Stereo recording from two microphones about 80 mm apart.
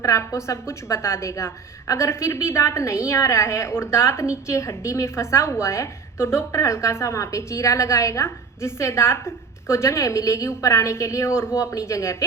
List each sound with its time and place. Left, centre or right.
0.0 s a woman's voice: left